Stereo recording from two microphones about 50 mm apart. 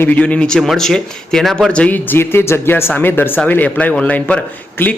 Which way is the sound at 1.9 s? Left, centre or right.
Left.